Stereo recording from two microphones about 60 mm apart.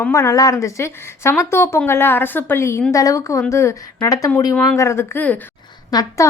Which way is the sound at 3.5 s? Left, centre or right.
Left.